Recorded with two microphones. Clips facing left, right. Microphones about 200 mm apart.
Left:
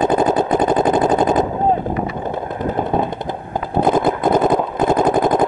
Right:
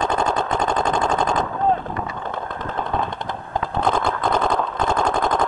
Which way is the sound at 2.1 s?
15° left (ahead or behind).